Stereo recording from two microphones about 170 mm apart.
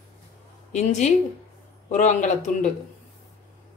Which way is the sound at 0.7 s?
45° left (ahead or behind).